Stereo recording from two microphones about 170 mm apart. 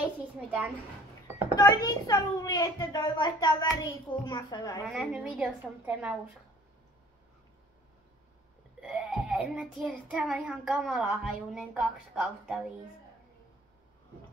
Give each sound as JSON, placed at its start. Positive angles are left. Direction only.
{"t": 1.5, "sound": "a child's voice", "side_deg": 25}
{"t": 4.8, "sound": "a child's voice", "side_deg": -5}
{"t": 8.8, "sound": "a child's voice", "side_deg": -5}